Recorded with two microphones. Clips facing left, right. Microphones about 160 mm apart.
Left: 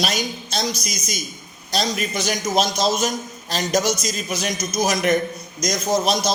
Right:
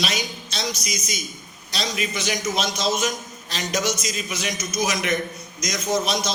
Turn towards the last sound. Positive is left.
turn(degrees=35)  # may be behind; listen again after turning